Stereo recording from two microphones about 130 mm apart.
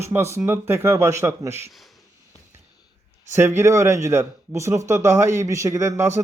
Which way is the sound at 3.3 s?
20° right (ahead or behind).